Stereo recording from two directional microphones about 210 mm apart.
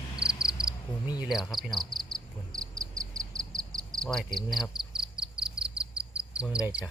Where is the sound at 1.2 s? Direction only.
Centre (ahead or behind).